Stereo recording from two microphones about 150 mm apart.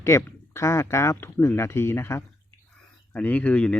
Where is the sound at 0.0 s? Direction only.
20° left (ahead or behind).